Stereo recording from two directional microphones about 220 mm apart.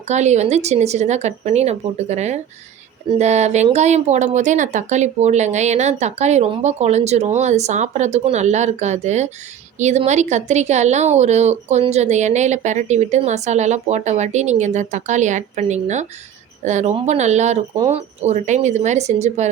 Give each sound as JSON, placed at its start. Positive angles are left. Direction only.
{"t": 0.1, "sound": "a woman's voice", "side_deg": -30}